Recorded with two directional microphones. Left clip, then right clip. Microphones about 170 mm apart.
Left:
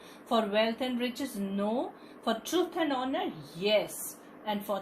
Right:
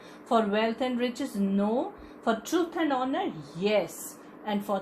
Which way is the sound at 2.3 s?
35° right (ahead or behind).